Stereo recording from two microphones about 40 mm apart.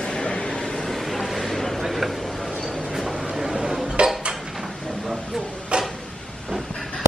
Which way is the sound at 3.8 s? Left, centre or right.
Right.